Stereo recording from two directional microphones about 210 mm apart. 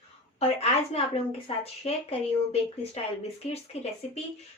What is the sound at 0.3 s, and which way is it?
Speech, 30° left (ahead or behind).